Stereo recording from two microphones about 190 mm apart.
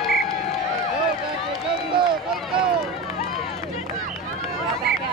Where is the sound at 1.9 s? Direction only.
25° right (ahead or behind).